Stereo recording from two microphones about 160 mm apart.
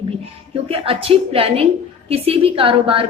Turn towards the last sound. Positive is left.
turn(degrees=-35)  # may be behind; listen again after turning